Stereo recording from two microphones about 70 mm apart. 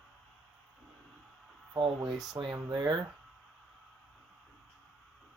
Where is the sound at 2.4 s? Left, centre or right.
Right.